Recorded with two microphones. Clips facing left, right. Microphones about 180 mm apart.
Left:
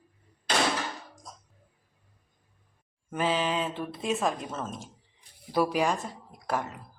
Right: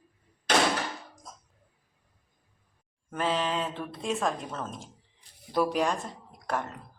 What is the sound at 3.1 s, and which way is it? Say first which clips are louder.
Speech: left 1 dB; 5° left (ahead or behind).